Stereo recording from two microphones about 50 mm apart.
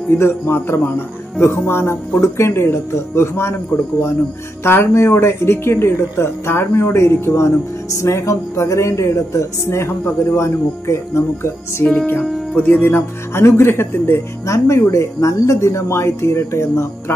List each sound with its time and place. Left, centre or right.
0.1 s a man's voice: left
4.6 s speech: left
11.8 s music: left
12.5 s speech: left